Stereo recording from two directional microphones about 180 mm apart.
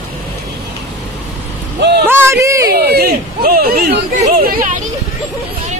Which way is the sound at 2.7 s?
60° right (ahead or behind).